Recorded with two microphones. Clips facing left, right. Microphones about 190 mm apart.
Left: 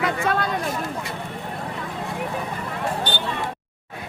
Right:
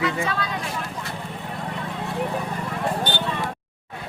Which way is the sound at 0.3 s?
50° left (ahead or behind).